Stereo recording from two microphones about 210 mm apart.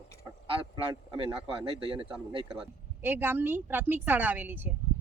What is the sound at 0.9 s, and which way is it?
Speech, 20° right (ahead or behind).